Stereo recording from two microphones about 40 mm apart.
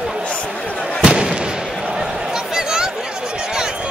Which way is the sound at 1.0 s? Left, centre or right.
Centre.